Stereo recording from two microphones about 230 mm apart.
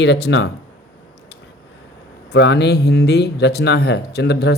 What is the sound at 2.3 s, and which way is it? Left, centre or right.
Speech, left.